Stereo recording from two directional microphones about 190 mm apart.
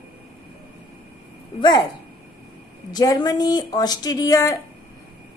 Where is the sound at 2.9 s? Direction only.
20° left (ahead or behind).